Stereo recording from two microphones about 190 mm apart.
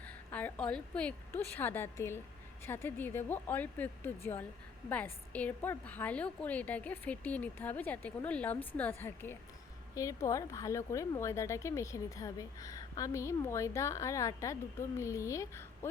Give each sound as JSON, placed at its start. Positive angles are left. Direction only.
{"t": 0.0, "sound": "speech", "side_deg": 10}